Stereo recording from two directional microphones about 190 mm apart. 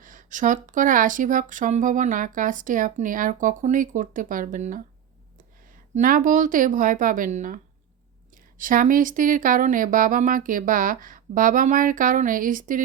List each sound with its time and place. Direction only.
0.0 s speech: 45° right (ahead or behind)
5.9 s speech: 45° right (ahead or behind)